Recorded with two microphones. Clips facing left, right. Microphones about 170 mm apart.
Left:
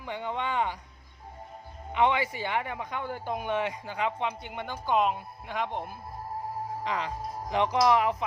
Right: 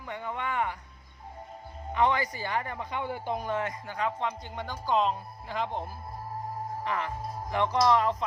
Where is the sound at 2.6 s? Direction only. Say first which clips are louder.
Even; 15° left (ahead or behind).